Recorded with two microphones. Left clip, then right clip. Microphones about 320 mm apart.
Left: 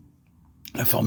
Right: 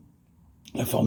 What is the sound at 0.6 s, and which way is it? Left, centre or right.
Speech, left.